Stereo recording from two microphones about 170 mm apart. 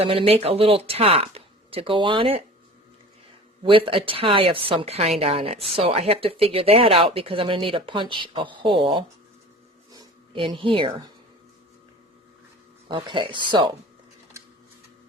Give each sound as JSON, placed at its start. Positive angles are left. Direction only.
{"t": 0.0, "sound": "speech", "side_deg": -35}
{"t": 3.6, "sound": "speech", "side_deg": -30}
{"t": 9.9, "sound": "a sound", "side_deg": -25}
{"t": 12.9, "sound": "speech", "side_deg": -30}